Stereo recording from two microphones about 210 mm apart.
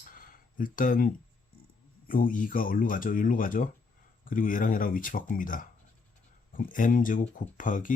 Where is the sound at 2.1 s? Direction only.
40° left (ahead or behind).